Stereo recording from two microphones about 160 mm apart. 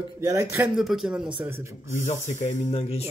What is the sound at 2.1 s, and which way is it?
Speech, 50° left (ahead or behind).